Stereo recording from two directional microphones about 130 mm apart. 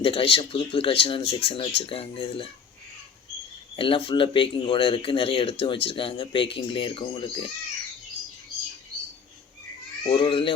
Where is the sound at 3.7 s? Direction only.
45° left (ahead or behind).